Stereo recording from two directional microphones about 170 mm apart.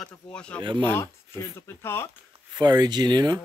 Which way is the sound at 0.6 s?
30° right (ahead or behind).